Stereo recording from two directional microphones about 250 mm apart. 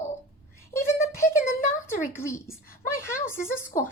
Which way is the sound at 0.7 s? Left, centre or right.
Centre.